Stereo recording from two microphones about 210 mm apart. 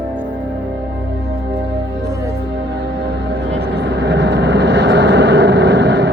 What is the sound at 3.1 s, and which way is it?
Vehicle, 55° right (ahead or behind).